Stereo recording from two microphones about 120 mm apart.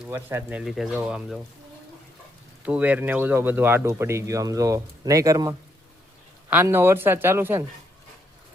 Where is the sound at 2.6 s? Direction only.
10° right (ahead or behind); by 5.6 s 30° right (ahead or behind).